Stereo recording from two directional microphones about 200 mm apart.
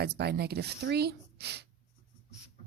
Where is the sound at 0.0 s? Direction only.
55° right (ahead or behind).